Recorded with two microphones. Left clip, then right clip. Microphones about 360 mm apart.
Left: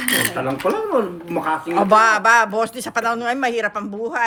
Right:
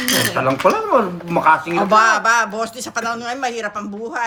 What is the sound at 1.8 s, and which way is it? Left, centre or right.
A man's voice, left.